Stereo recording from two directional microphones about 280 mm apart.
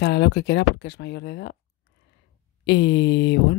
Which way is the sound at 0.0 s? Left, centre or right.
Left.